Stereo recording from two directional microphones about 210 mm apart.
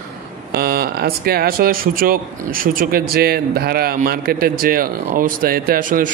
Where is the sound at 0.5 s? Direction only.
45° right (ahead or behind).